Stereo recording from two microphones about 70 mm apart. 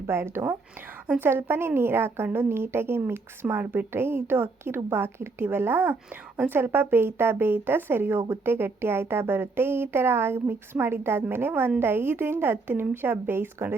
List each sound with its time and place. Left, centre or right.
0.1 s a woman's voice: right
5.9 s a woman's voice: centre
6.5 s a woman's voice: right